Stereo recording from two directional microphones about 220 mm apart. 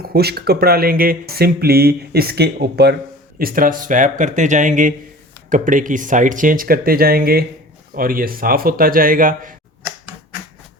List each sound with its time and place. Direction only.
0.0 s speech: 45° right (ahead or behind)